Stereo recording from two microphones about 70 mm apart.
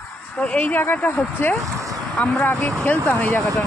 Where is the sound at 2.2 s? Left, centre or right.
Left.